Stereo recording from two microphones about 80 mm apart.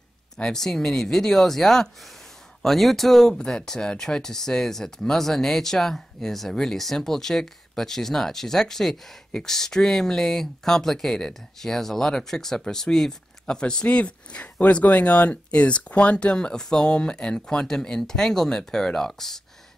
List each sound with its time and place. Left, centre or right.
0.4 s speech: centre